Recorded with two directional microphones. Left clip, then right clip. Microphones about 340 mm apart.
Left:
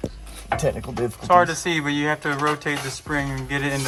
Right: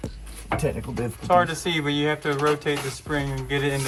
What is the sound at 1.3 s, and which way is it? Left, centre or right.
Speech, centre.